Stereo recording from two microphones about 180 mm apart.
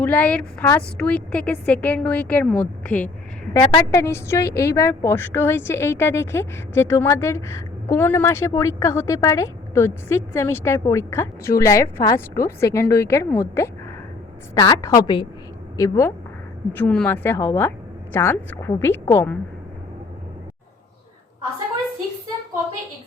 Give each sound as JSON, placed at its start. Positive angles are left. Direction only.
{"t": 0.0, "sound": "a woman's voice", "side_deg": 10}
{"t": 16.7, "sound": "a woman's voice", "side_deg": 5}